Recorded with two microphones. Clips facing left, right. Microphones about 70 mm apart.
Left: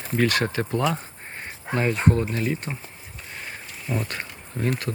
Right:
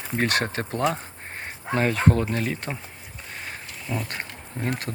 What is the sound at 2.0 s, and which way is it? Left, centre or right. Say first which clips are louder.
Speech: even; right.